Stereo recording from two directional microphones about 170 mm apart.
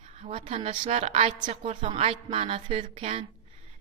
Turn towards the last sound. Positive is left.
turn(degrees=-35)  # may be behind; listen again after turning